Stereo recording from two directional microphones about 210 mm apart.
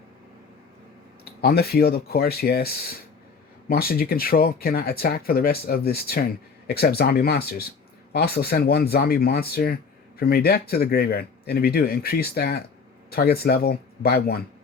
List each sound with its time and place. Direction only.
1.2 s speech: 45° left (ahead or behind)